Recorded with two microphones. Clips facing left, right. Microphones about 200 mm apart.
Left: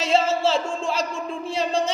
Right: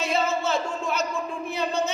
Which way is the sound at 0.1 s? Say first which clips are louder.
Left 6 dB; 30° left (ahead or behind).